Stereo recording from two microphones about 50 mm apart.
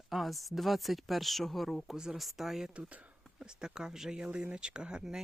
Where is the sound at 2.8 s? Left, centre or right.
Right.